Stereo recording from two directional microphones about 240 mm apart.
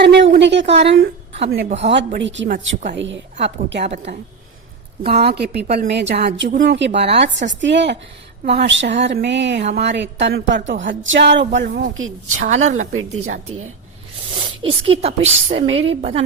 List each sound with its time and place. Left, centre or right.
0.0 s a woman's voice: right
3.8 s a woman's voice: right
5.1 s a woman's voice: right
12.3 s a woman's voice: right
14.6 s a woman's voice: right